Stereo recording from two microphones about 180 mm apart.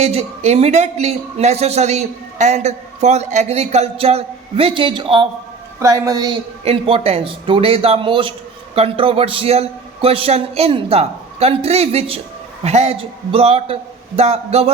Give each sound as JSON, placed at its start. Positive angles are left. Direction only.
{"t": 0.0, "sound": "a man's voice", "side_deg": -35}